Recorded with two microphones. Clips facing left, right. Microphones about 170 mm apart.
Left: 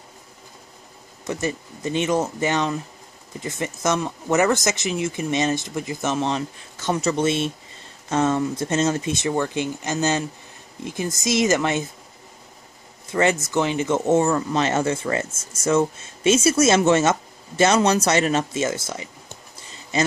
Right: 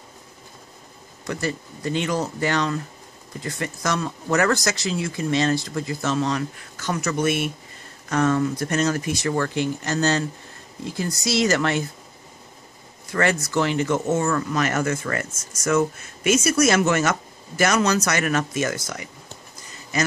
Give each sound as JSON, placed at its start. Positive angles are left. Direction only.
{"t": 1.2, "sound": "speech", "side_deg": 20}
{"t": 13.1, "sound": "speech", "side_deg": 20}